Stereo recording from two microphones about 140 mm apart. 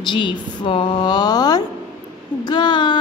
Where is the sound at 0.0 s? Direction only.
35° left (ahead or behind).